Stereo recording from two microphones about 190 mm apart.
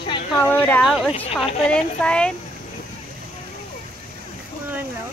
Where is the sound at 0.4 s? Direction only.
10° left (ahead or behind).